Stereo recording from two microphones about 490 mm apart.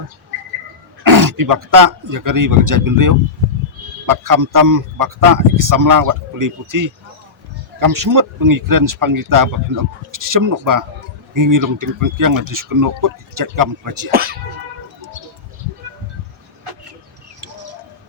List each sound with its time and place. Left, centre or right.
1.0 s speech: right